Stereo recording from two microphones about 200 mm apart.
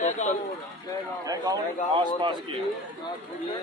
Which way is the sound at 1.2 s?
20° right (ahead or behind).